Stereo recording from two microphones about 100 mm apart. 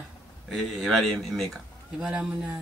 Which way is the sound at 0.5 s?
Centre (ahead or behind).